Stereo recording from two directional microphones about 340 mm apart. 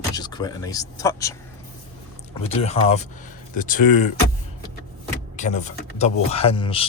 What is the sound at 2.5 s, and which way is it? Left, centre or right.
Speech, centre.